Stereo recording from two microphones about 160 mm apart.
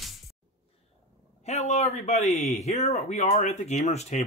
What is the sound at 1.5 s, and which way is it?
Speech, 45° left (ahead or behind).